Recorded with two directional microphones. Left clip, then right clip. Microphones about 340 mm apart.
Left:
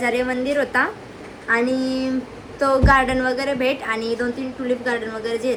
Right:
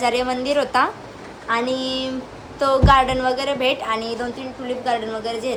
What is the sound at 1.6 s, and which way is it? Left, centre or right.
A woman's voice, centre.